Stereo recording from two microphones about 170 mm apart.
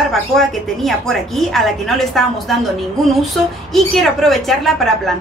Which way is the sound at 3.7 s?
Centre (ahead or behind).